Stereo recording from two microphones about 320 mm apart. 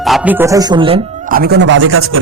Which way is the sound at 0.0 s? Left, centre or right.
Centre.